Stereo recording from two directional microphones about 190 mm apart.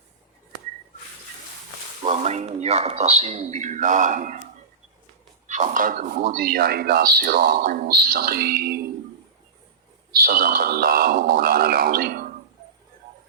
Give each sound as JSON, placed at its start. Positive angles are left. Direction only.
{"t": 2.0, "sound": "speech", "side_deg": -35}
{"t": 5.5, "sound": "speech", "side_deg": -40}
{"t": 10.1, "sound": "speech", "side_deg": -50}